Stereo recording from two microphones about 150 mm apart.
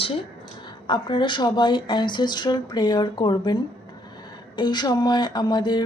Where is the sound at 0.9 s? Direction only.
30° left (ahead or behind).